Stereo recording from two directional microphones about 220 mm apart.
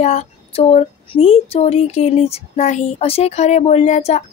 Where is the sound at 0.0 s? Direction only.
30° left (ahead or behind).